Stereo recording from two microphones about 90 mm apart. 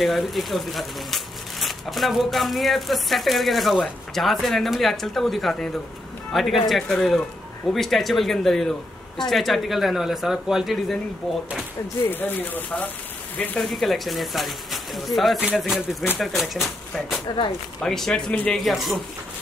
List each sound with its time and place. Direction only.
0.0 s speech: centre (ahead or behind)
12.1 s speech: 20° left (ahead or behind)
13.6 s speech: centre (ahead or behind)
18.3 s speech: 15° left (ahead or behind)
18.6 s speech: centre (ahead or behind)